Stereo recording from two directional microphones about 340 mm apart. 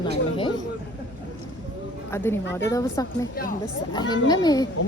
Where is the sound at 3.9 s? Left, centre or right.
Centre.